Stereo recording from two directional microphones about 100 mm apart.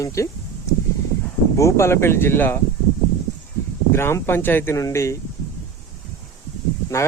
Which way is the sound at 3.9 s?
25° left (ahead or behind).